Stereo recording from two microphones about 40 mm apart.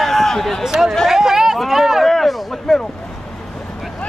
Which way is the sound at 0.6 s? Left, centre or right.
Centre.